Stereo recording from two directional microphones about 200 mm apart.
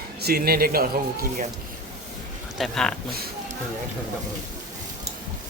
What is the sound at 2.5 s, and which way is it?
Speech, centre (ahead or behind).